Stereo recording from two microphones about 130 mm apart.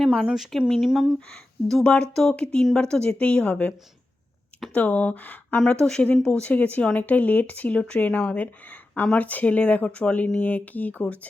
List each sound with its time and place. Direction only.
0.0 s speech: centre (ahead or behind)